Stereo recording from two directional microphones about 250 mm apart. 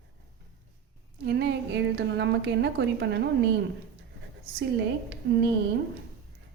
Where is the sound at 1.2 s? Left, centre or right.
Right.